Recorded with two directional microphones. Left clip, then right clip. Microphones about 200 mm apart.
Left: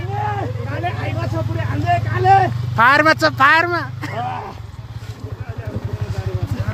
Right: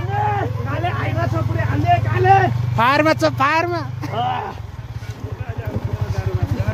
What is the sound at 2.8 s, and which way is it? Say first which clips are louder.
Speech: left 3 dB; centre (ahead or behind).